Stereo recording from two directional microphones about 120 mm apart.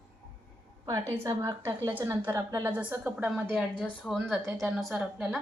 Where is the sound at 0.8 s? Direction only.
25° right (ahead or behind).